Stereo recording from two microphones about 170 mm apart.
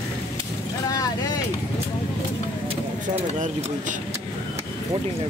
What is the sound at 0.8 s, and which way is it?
Vehicle, 20° left (ahead or behind).